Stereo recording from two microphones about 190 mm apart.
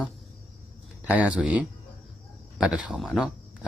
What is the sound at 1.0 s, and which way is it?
Speech, 5° right (ahead or behind).